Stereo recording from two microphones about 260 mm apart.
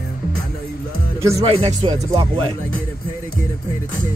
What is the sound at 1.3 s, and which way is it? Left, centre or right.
Speech, right.